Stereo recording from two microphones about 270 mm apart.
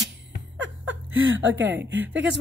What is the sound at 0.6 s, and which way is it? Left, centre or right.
Speech, right.